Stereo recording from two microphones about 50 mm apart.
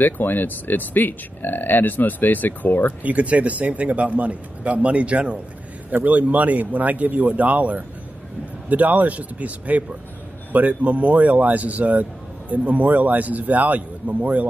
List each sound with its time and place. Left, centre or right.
0.0 s speech: left
3.0 s a man's voice: right